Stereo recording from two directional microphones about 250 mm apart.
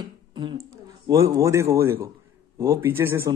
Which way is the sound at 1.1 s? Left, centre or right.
Centre.